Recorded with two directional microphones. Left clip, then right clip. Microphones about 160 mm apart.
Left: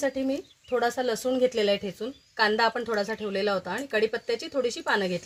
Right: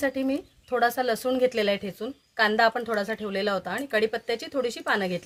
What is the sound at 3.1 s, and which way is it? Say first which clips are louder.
Speech: even; centre (ahead or behind).